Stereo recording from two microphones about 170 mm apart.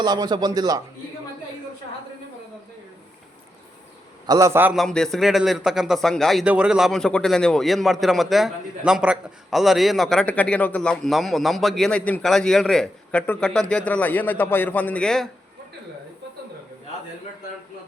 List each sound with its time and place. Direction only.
0.0 s a man's voice: 25° right (ahead or behind)
4.3 s a man's voice: 20° right (ahead or behind)
4.7 s a man's voice: centre (ahead or behind)